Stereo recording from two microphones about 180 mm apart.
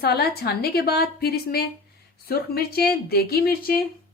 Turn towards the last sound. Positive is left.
turn(degrees=60)  # may be behind; listen again after turning